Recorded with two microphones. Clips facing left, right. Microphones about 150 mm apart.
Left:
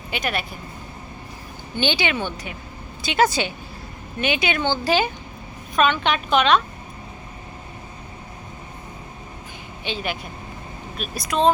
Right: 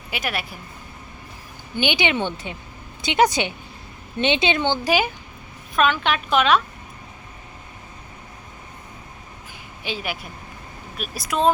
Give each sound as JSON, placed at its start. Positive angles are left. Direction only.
{"t": 0.1, "sound": "a woman's voice", "side_deg": -5}
{"t": 1.7, "sound": "a woman's voice", "side_deg": -15}
{"t": 9.8, "sound": "a woman's voice", "side_deg": -5}